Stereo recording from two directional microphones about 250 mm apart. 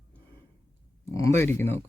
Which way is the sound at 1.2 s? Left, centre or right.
Centre.